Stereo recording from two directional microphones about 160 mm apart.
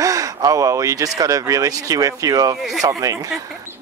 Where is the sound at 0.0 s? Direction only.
20° right (ahead or behind).